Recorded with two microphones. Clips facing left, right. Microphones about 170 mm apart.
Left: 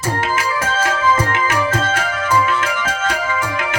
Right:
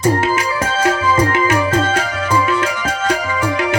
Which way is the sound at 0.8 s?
35° right (ahead or behind).